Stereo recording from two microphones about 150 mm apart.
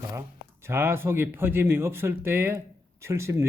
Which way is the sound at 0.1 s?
15° right (ahead or behind).